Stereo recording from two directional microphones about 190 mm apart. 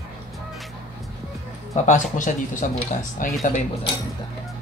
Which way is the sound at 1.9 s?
40° left (ahead or behind).